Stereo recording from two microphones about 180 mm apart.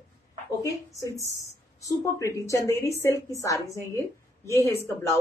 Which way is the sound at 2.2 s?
15° left (ahead or behind).